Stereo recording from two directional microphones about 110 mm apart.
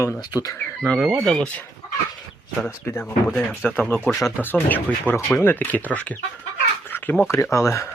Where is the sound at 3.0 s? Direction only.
10° left (ahead or behind).